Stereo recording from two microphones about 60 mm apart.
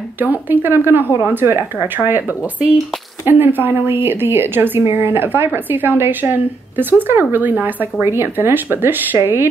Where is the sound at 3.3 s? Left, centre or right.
Right.